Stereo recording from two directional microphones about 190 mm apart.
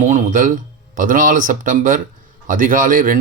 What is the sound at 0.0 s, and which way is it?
Speech, 40° right (ahead or behind).